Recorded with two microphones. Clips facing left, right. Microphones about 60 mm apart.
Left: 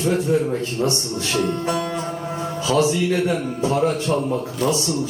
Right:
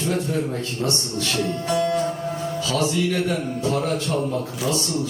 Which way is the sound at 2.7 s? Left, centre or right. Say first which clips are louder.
Left 5 dB; left.